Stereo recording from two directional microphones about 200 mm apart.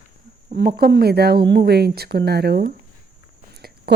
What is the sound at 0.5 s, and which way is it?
Speech, 50° right (ahead or behind).